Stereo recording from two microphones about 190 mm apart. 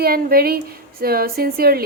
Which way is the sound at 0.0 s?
50° right (ahead or behind).